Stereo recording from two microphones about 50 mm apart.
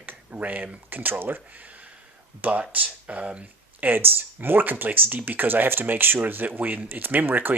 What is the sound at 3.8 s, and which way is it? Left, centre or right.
Speech, right.